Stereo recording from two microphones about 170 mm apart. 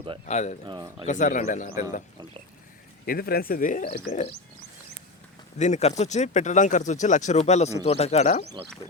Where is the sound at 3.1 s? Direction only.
65° left (ahead or behind); by 4.3 s 50° left (ahead or behind).